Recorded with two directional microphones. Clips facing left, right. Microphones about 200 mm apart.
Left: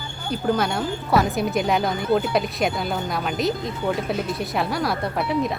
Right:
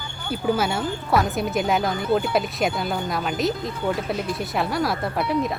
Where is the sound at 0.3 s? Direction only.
5° right (ahead or behind).